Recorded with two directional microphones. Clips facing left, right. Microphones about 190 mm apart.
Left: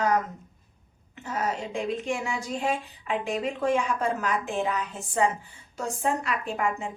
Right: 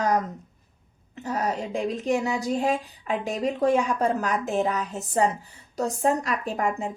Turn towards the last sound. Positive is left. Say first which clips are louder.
# right 2 dB
turn(degrees=-40)  # may be behind; listen again after turning